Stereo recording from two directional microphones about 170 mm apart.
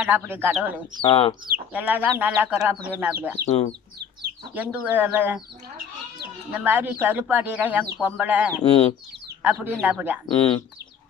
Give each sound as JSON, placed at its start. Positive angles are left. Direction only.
{"t": 0.0, "sound": "speech", "side_deg": -10}
{"t": 1.0, "sound": "speech", "side_deg": 35}
{"t": 1.7, "sound": "speech", "side_deg": -10}
{"t": 3.4, "sound": "speech", "side_deg": 35}
{"t": 4.6, "sound": "speech", "side_deg": -10}
{"t": 6.5, "sound": "speech", "side_deg": -10}
{"t": 8.6, "sound": "speech", "side_deg": 35}
{"t": 9.4, "sound": "speech", "side_deg": -10}